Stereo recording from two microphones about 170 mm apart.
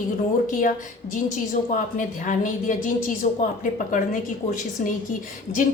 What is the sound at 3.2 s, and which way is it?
Speech, 40° left (ahead or behind).